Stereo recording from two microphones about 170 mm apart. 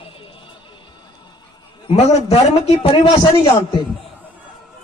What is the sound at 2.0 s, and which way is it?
A man's voice, 35° left (ahead or behind).